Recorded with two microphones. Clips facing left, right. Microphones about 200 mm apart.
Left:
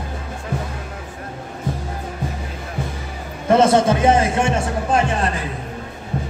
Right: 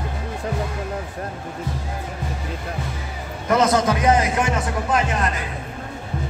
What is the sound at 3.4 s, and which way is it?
Speech, 25° left (ahead or behind).